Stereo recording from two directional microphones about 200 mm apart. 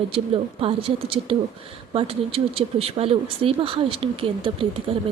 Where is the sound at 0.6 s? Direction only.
25° right (ahead or behind).